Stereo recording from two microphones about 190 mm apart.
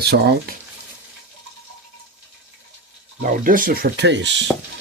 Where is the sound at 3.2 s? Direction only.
45° right (ahead or behind); by 4.4 s 70° right (ahead or behind).